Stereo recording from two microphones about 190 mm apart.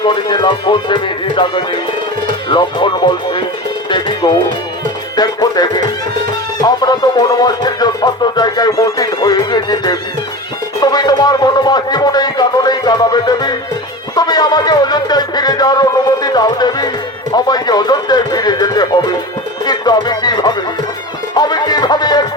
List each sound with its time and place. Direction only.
0.0 s speech: 25° left (ahead or behind)
3.8 s music: 25° left (ahead or behind)
10.8 s speech: 20° left (ahead or behind)
21.3 s music: 20° left (ahead or behind)